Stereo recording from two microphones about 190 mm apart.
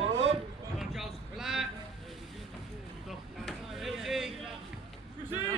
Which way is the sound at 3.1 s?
Centre (ahead or behind).